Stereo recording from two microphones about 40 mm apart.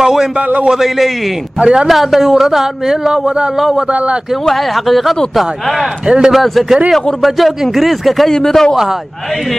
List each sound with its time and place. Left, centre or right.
0.0 s a sound: centre
0.7 s speech: centre
1.6 s a man's voice: right
1.9 s speech: centre
3.1 s speech: centre
4.5 s speech: centre
6.0 s a man's voice: right
6.3 s speech: centre
8.3 s speech: centre